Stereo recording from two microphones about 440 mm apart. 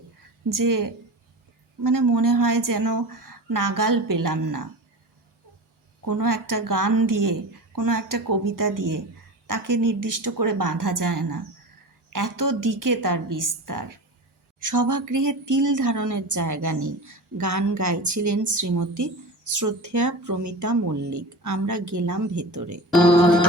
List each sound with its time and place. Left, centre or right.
0.4 s a woman's voice: right
6.1 s a woman's voice: right